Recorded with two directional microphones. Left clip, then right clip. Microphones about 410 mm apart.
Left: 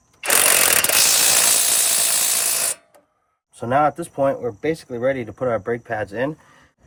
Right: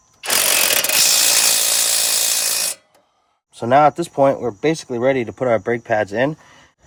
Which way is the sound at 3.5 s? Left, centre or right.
Right.